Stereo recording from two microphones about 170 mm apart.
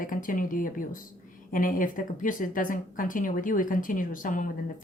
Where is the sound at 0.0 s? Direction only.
50° left (ahead or behind).